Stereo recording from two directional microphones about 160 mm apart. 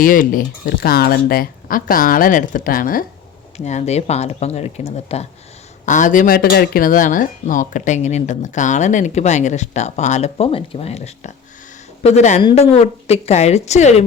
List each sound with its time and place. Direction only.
0.0 s speech: 60° left (ahead or behind)
3.6 s speech: 45° left (ahead or behind)
5.8 s speech: 50° left (ahead or behind)